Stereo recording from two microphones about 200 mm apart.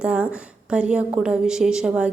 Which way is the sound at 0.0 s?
5° right (ahead or behind).